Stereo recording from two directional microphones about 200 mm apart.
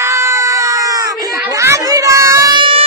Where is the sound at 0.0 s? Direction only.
15° right (ahead or behind).